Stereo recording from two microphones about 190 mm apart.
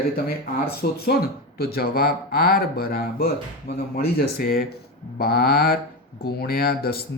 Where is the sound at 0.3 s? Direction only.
55° left (ahead or behind).